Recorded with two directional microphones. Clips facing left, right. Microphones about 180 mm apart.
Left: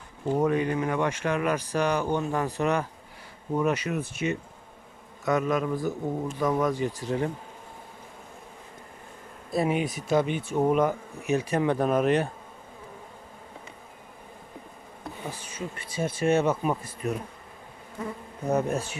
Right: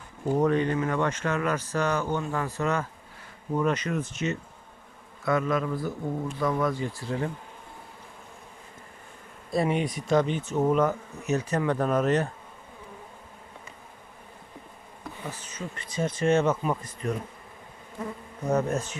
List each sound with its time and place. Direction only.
0.3 s speech: 10° left (ahead or behind)
9.5 s speech: 5° left (ahead or behind)
15.3 s speech: 10° left (ahead or behind)
18.5 s speech: 10° left (ahead or behind)